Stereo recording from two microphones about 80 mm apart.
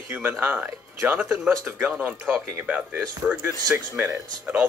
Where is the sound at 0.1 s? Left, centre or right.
Right.